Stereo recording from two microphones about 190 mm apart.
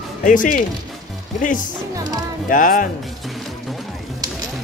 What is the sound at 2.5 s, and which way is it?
Speech, 45° left (ahead or behind).